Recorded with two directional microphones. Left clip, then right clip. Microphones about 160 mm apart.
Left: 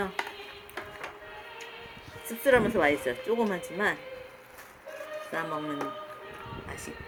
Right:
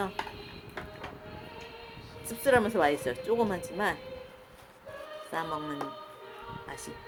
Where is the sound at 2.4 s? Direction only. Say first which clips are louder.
Left 2 dB; 15° right (ahead or behind).